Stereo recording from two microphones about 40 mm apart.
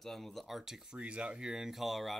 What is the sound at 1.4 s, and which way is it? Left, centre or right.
Speech, centre.